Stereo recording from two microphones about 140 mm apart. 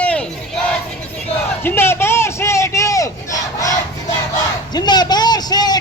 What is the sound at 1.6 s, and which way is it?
Speech, 15° left (ahead or behind).